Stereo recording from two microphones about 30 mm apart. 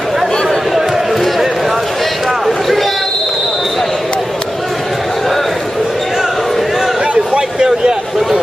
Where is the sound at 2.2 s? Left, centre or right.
Centre.